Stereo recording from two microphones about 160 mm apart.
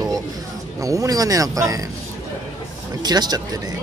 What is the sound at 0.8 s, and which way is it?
Speech, 20° right (ahead or behind).